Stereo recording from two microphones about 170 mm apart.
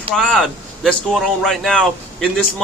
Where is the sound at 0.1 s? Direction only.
Centre (ahead or behind).